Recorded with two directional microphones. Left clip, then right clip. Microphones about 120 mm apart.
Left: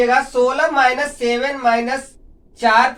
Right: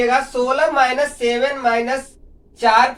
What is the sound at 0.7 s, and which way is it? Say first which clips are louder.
A woman's voice: left 1 dB; 30° right (ahead or behind).